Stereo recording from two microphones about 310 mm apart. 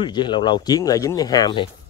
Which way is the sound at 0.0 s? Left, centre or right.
Centre.